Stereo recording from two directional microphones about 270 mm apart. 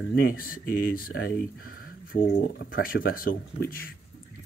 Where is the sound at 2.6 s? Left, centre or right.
Left.